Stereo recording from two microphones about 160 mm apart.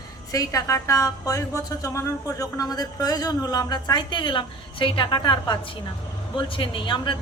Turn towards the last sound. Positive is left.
turn(degrees=30)  # may be behind; listen again after turning